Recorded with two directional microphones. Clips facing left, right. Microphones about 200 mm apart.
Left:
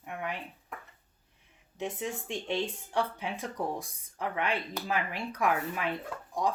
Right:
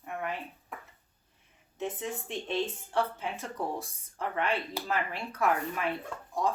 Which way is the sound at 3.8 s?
15° left (ahead or behind).